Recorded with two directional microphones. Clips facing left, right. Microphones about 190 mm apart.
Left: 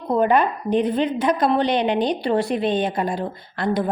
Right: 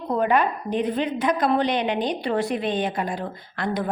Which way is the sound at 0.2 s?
30° left (ahead or behind).